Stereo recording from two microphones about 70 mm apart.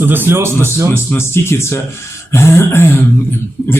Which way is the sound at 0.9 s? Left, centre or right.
Left.